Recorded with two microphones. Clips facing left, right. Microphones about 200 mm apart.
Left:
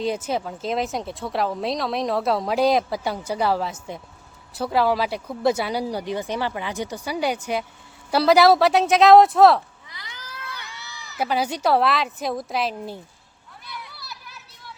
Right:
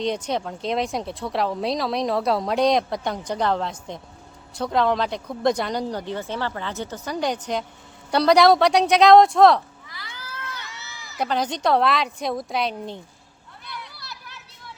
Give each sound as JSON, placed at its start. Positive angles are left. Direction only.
{"t": 0.0, "sound": "speech", "side_deg": 5}
{"t": 9.9, "sound": "a sound", "side_deg": 20}
{"t": 10.7, "sound": "speech", "side_deg": 5}
{"t": 13.7, "sound": "children playing", "side_deg": 0}